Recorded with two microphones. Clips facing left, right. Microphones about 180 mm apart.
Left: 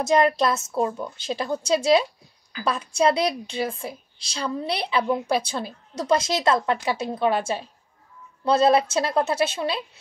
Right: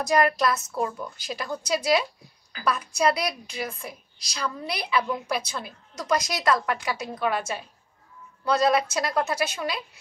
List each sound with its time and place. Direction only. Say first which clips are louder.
0.0 s a woman's voice: left 3 dB; 25° left (ahead or behind)